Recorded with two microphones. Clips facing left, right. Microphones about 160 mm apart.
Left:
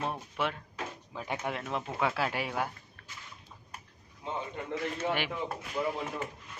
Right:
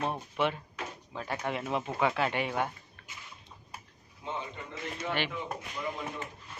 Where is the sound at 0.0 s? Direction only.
Centre (ahead or behind).